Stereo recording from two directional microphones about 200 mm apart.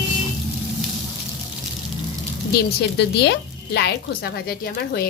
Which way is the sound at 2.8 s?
60° left (ahead or behind).